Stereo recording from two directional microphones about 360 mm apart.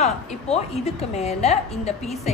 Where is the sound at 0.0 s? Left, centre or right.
Centre.